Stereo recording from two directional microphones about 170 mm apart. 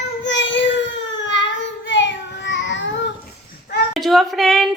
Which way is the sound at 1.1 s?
90° left.